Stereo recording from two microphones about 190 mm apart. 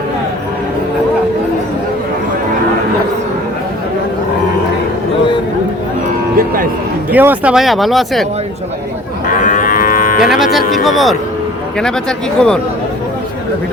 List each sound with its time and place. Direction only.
7.1 s speech: 10° right (ahead or behind)
9.4 s livestock: 45° left (ahead or behind)
10.3 s speech: centre (ahead or behind)